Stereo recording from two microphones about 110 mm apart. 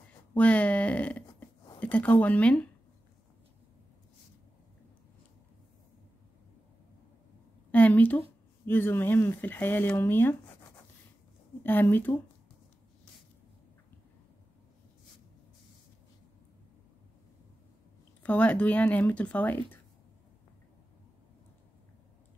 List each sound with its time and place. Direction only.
0.3 s speech: 15° left (ahead or behind)
7.7 s a sound: 15° left (ahead or behind)
8.6 s speech: 20° left (ahead or behind)
11.6 s speech: 20° left (ahead or behind)
18.2 s speech: 15° left (ahead or behind)